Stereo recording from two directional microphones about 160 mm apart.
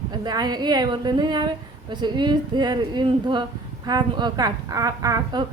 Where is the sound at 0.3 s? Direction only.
25° right (ahead or behind).